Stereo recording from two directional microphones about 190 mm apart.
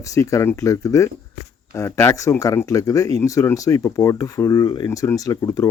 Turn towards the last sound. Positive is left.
turn(degrees=20)  # may be behind; listen again after turning